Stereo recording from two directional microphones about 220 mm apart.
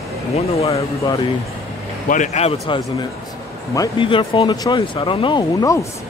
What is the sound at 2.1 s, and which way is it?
Speech, 30° left (ahead or behind).